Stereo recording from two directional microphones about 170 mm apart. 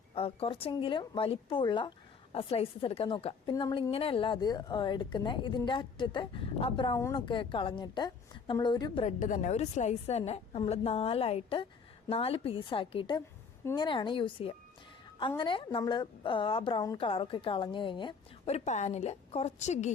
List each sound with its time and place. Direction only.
0.1 s a woman's voice: 35° left (ahead or behind)
9.0 s a woman's voice: 50° left (ahead or behind)